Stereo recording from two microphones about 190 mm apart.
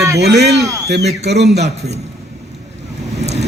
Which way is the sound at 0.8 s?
60° right (ahead or behind).